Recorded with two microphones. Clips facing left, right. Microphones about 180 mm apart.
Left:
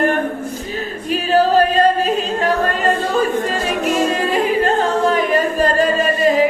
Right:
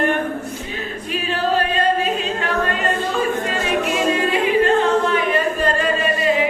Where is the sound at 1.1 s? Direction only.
40° left (ahead or behind).